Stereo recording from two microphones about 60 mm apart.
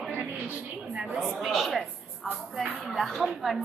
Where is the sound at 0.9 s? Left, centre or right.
Centre.